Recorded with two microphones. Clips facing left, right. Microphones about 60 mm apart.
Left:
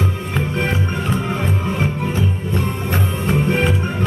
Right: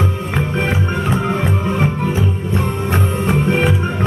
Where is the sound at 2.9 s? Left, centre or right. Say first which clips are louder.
Right 2 dB; right.